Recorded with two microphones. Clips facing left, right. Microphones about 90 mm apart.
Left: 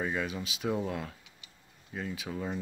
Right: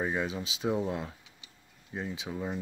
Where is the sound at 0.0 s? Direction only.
20° right (ahead or behind).